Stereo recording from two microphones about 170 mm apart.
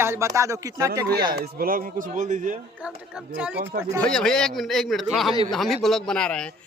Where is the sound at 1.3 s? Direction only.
60° right (ahead or behind).